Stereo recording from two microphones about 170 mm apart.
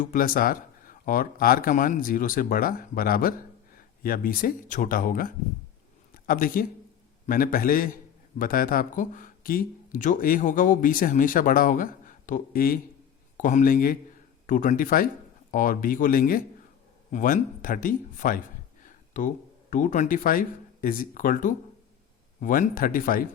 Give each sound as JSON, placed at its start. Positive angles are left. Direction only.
{"t": 0.0, "sound": "speech", "side_deg": 55}